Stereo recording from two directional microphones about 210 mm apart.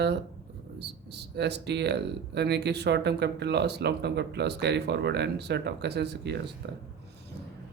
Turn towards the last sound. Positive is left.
turn(degrees=-55)  # may be behind; listen again after turning